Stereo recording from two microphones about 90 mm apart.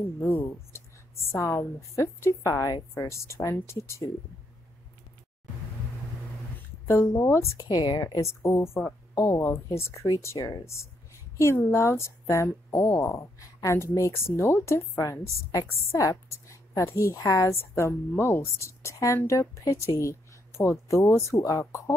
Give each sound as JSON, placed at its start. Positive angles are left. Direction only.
{"t": 0.2, "sound": "speech", "side_deg": 25}
{"t": 6.9, "sound": "speech", "side_deg": 30}
{"t": 7.6, "sound": "speech", "side_deg": 50}